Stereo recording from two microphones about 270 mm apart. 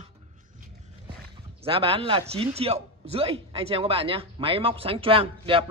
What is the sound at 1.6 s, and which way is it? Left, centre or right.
A man's voice, centre.